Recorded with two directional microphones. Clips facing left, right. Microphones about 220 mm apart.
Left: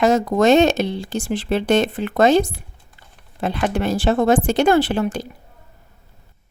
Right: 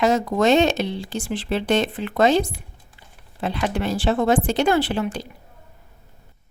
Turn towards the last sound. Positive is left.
turn(degrees=45)  # may be behind; listen again after turning